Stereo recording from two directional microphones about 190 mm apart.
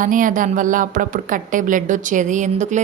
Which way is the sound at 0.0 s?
45° right (ahead or behind).